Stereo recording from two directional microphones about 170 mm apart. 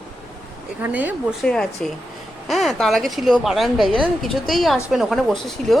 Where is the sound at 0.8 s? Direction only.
10° right (ahead or behind).